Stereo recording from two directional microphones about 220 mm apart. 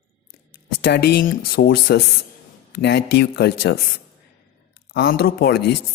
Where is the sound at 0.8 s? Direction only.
45° left (ahead or behind).